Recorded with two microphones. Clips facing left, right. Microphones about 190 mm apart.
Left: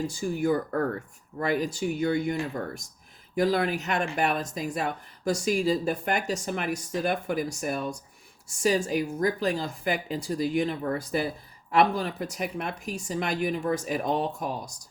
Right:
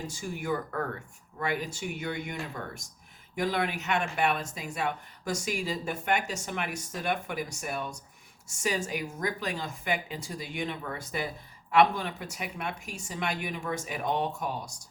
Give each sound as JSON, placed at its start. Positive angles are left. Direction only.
{"t": 0.1, "sound": "speech", "side_deg": 35}